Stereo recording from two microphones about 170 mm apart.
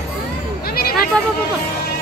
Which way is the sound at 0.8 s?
60° left (ahead or behind).